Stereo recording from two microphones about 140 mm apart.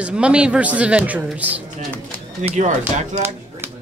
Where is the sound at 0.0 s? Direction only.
5° right (ahead or behind).